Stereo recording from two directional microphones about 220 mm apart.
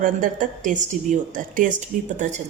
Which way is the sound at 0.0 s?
35° right (ahead or behind).